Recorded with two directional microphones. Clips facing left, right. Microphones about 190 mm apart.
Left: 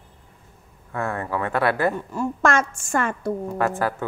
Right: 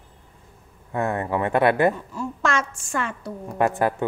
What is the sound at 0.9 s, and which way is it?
Speech, 20° right (ahead or behind).